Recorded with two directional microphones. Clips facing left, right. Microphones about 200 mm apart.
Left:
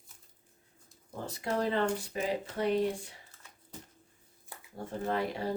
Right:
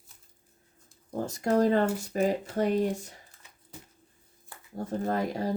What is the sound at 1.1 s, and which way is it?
Speech, 45° right (ahead or behind).